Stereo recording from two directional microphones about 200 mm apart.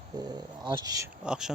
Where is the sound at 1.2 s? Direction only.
5° right (ahead or behind).